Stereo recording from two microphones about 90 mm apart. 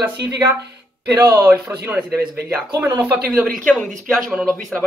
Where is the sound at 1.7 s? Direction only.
20° right (ahead or behind).